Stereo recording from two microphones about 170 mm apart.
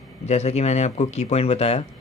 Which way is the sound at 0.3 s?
40° left (ahead or behind).